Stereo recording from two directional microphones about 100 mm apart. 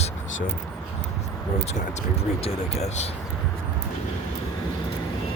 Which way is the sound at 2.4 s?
80° left.